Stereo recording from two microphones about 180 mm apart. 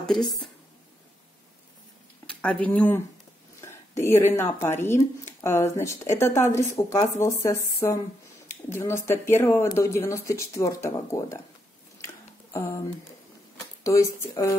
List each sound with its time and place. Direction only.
0.0 s a woman's voice: centre (ahead or behind)
2.2 s speech: 5° left (ahead or behind)
13.8 s speech: 20° left (ahead or behind)